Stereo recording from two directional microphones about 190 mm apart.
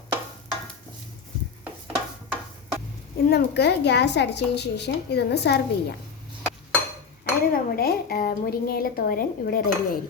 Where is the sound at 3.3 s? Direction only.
60° left (ahead or behind).